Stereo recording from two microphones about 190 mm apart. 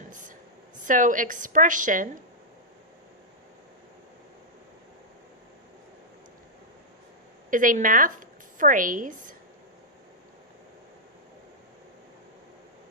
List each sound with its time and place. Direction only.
0.1 s a sound: 40° right (ahead or behind)
0.9 s a woman's voice: 45° right (ahead or behind)
7.5 s a woman's voice: 45° right (ahead or behind)